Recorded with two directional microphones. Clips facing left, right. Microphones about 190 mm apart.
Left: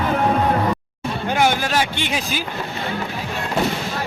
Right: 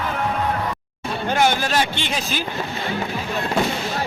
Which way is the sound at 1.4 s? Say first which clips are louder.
Even; 10° left (ahead or behind).